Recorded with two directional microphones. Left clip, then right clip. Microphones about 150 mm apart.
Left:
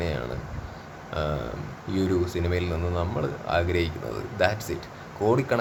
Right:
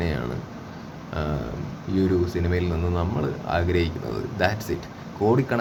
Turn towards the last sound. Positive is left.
turn(degrees=15)  # may be behind; listen again after turning